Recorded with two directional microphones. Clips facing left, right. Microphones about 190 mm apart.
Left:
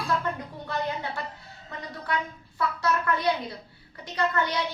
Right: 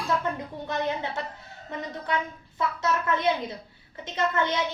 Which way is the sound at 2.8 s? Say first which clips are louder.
Even; 20° right (ahead or behind).